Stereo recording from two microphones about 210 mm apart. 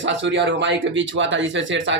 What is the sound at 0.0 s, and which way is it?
Speech, 60° right (ahead or behind).